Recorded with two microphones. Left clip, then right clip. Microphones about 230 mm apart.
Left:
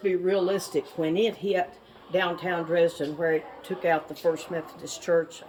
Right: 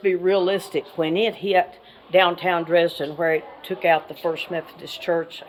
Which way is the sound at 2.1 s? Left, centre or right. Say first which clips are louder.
Right 9 dB; right.